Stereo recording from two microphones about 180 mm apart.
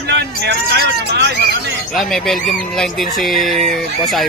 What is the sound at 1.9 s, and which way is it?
Speech, centre (ahead or behind).